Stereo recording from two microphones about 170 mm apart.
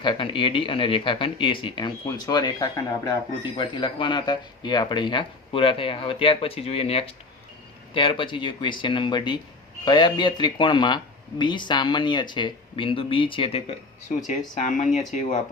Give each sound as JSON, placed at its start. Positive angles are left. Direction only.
{"t": 0.0, "sound": "speech", "side_deg": 30}
{"t": 14.3, "sound": "speech", "side_deg": 45}